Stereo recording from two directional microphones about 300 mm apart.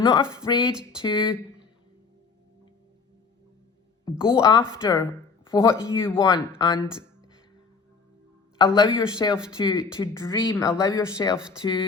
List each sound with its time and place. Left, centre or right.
0.0 s speech: centre
4.3 s speech: centre
8.5 s speech: centre